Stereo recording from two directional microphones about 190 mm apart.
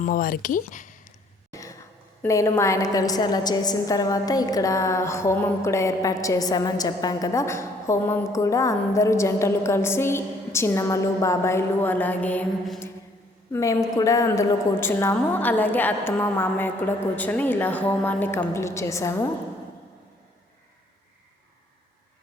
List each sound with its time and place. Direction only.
0.0 s speech: 45° left (ahead or behind)
2.2 s a woman's voice: 15° left (ahead or behind)
13.5 s a woman's voice: 15° left (ahead or behind)